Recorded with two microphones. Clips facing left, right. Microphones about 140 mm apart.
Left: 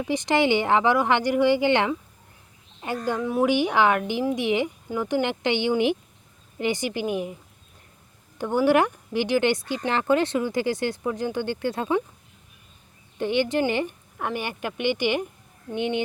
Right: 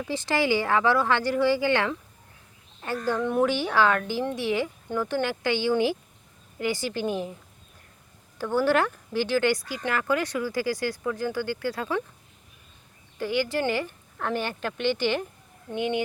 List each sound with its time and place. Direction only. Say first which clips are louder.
0.0 s speech: left 4 dB; 15° left (ahead or behind)
3.2 s a woman's voice: left 1 dB; 5° left (ahead or behind)
3.5 s speech: left 3 dB; 15° left (ahead or behind)
8.4 s speech: left 3 dB; 15° left (ahead or behind)
13.1 s speech: left 3 dB; 20° left (ahead or behind)